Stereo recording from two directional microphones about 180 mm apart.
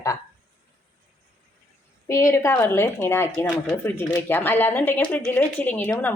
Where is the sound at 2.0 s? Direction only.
15° left (ahead or behind).